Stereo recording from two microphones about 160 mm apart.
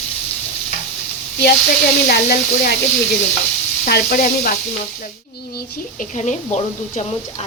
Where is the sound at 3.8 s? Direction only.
70° left (ahead or behind).